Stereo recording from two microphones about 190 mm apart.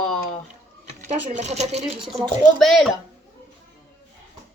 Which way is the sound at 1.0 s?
40° right (ahead or behind).